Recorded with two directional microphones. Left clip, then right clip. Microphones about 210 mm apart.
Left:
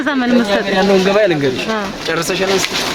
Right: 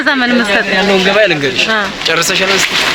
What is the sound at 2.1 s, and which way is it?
Speech, 50° left (ahead or behind).